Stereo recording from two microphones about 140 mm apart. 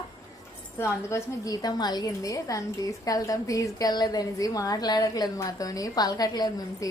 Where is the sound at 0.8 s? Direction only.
20° left (ahead or behind).